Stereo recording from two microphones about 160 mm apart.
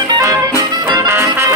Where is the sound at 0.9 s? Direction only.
15° right (ahead or behind).